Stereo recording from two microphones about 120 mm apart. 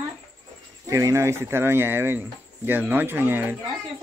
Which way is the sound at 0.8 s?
25° right (ahead or behind).